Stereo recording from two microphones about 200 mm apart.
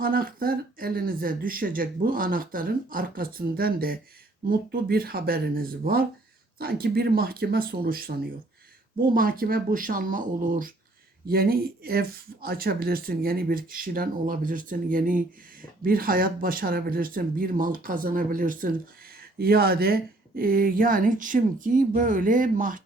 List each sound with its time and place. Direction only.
0.0 s speech: 45° right (ahead or behind)